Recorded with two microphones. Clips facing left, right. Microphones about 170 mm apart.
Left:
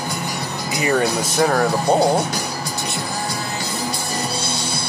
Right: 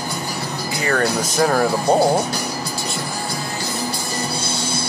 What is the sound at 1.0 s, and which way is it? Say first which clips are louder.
Speech: right 2 dB; centre (ahead or behind).